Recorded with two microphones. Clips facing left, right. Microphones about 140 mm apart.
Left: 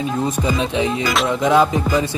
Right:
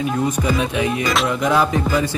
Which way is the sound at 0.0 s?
20° left (ahead or behind).